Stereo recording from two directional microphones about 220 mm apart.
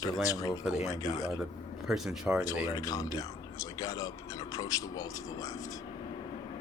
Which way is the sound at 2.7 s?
15° left (ahead or behind).